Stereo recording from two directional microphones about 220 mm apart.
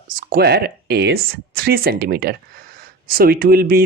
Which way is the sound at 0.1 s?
40° right (ahead or behind).